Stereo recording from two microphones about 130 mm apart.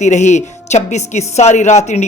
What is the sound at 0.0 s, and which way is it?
A man's voice, 65° left (ahead or behind).